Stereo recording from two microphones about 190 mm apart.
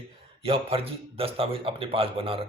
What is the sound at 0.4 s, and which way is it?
A man's voice, 30° right (ahead or behind).